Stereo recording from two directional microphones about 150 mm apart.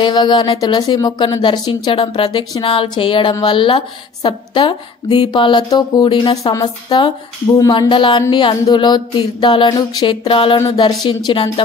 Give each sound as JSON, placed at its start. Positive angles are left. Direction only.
{"t": 0.0, "sound": "speech", "side_deg": 30}